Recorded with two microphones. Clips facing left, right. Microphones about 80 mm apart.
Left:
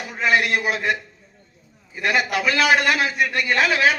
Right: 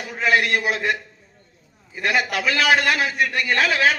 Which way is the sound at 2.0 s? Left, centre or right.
Centre.